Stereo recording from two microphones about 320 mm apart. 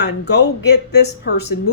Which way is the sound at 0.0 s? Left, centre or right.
Left.